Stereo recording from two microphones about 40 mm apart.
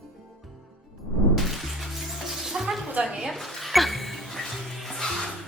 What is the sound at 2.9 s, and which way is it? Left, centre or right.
Speech, right.